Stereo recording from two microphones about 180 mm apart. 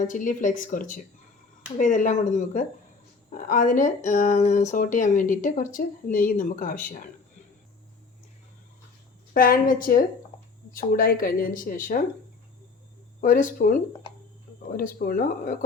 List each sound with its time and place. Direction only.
0.0 s speech: 45° left (ahead or behind)
9.3 s speech: 50° left (ahead or behind)
13.2 s speech: 45° left (ahead or behind)
14.8 s speech: 50° left (ahead or behind)